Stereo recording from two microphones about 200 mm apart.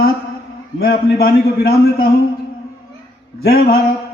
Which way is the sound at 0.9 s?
50° left (ahead or behind).